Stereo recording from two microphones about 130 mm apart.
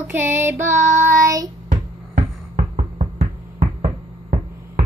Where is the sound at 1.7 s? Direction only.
70° right (ahead or behind).